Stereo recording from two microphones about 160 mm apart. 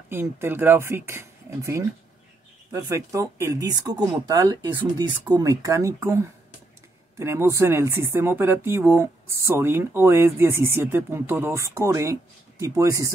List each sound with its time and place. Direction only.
0.1 s speech: 15° right (ahead or behind)